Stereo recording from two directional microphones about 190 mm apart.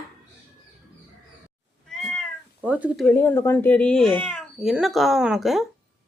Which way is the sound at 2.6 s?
10° right (ahead or behind).